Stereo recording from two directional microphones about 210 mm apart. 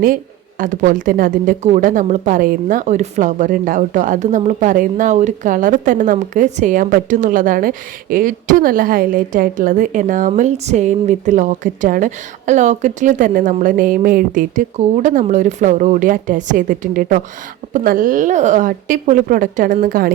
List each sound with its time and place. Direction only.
0.6 s a woman's voice: 40° right (ahead or behind)